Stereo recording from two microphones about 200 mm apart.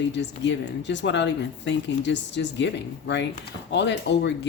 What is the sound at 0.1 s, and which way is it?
Speech, 60° left (ahead or behind).